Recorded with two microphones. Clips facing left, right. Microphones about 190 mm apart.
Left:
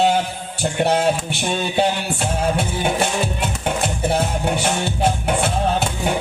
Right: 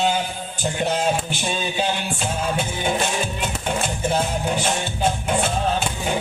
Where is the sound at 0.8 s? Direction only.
70° left (ahead or behind).